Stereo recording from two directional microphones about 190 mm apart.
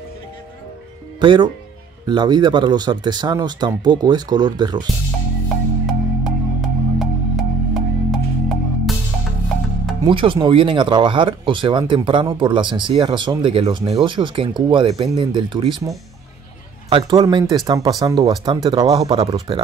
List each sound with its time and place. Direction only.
1.2 s speech: 25° right (ahead or behind)
5.5 s music: centre (ahead or behind)
10.0 s speech: 25° right (ahead or behind)
16.9 s speech: 25° right (ahead or behind)